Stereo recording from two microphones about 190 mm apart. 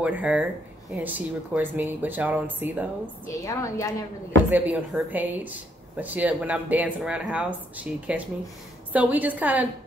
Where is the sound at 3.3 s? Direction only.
15° left (ahead or behind).